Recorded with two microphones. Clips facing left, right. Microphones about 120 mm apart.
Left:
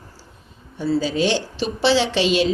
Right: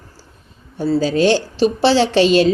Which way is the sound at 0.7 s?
40° right (ahead or behind).